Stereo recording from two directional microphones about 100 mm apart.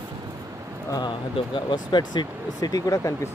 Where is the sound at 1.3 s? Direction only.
50° left (ahead or behind).